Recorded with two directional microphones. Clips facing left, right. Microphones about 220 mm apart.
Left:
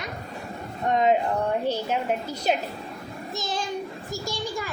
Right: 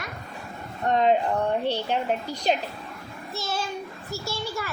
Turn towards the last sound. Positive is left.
turn(degrees=15)  # may be behind; listen again after turning